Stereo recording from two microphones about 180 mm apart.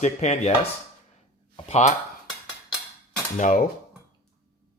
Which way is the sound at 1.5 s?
35° left (ahead or behind).